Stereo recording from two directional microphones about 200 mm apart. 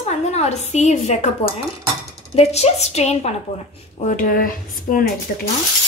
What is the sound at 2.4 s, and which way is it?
A woman's voice, 30° left (ahead or behind).